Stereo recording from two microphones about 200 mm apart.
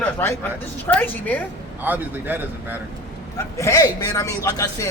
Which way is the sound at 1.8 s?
10° right (ahead or behind).